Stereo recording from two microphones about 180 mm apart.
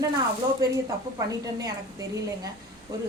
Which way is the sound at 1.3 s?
20° right (ahead or behind).